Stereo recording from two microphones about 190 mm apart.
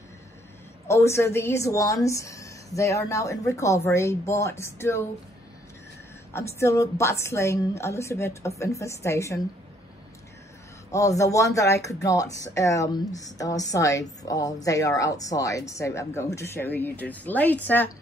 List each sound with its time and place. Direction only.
0.8 s speech: 15° left (ahead or behind)
6.6 s speech: 15° left (ahead or behind)
10.9 s speech: 15° left (ahead or behind)